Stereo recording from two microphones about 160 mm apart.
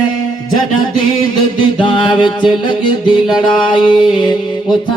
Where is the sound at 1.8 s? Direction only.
30° left (ahead or behind).